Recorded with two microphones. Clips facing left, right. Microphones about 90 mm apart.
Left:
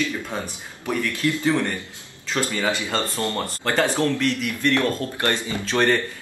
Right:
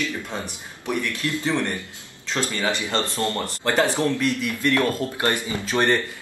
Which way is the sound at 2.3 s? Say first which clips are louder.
Left 1 dB; 15° left (ahead or behind).